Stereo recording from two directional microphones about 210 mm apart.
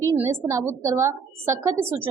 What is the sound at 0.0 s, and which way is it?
A woman's voice, 10° right (ahead or behind).